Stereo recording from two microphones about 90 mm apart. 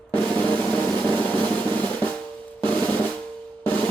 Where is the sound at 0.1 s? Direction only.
15° left (ahead or behind).